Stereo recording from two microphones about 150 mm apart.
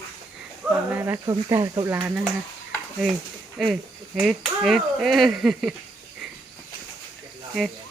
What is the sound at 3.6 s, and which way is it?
Speech, centre (ahead or behind).